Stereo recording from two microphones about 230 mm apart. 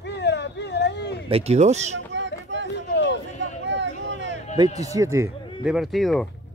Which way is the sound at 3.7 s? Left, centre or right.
Right.